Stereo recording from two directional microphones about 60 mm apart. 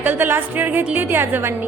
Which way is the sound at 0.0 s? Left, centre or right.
Right.